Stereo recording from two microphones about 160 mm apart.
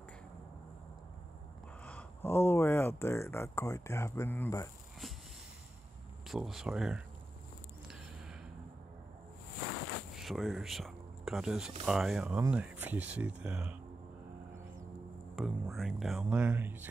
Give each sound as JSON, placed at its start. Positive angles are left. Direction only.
{"t": 1.9, "sound": "speech", "side_deg": 10}
{"t": 6.2, "sound": "speech", "side_deg": 0}
{"t": 10.1, "sound": "speech", "side_deg": 0}
{"t": 15.4, "sound": "speech", "side_deg": 0}
{"t": 16.3, "sound": "speech", "side_deg": -10}